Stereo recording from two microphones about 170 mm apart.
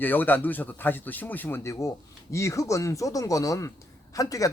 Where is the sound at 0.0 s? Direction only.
10° left (ahead or behind).